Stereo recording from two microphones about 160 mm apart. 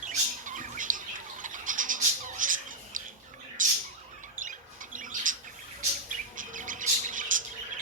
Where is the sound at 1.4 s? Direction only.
55° right (ahead or behind).